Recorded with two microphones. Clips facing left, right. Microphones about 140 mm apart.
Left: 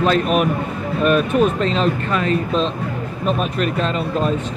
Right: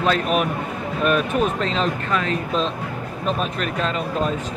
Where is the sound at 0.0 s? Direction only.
Centre (ahead or behind).